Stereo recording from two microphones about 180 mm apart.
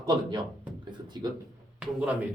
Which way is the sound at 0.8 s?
25° right (ahead or behind).